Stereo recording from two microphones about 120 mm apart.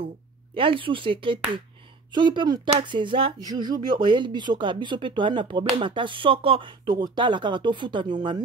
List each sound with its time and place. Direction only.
0.6 s speech: 45° right (ahead or behind)
3.3 s speech: 35° right (ahead or behind)